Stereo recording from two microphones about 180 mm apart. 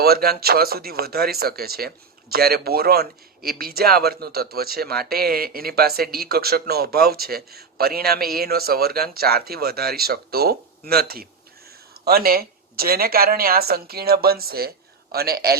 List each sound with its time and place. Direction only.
0.0 s speech: 60° right (ahead or behind)